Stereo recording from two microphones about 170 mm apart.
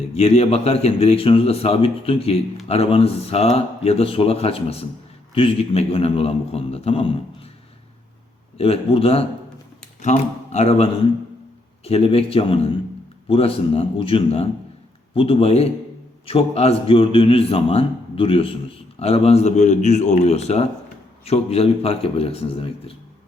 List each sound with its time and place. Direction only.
0.1 s a man's voice: 35° left (ahead or behind)
8.5 s a man's voice: 35° left (ahead or behind)
11.9 s a man's voice: 35° left (ahead or behind)